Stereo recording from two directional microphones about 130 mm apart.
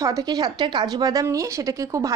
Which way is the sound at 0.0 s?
30° right (ahead or behind).